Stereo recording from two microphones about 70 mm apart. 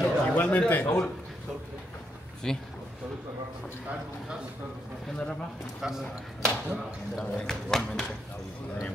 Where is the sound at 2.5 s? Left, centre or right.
Centre.